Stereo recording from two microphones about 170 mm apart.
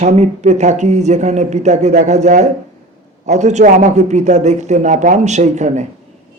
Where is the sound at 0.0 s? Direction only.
40° right (ahead or behind).